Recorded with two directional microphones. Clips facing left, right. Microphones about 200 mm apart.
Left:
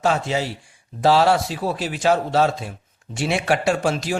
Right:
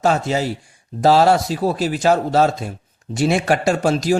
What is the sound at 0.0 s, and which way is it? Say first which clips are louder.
A man's voice: right 3 dB; 40° right (ahead or behind).